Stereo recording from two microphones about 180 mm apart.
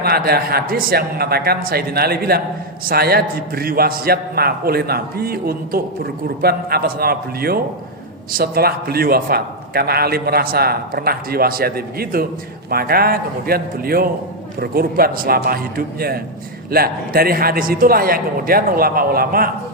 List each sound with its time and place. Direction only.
0.0 s a man's voice: 60° right (ahead or behind)